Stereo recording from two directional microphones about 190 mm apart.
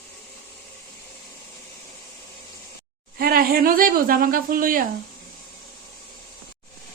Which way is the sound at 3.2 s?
50° right (ahead or behind).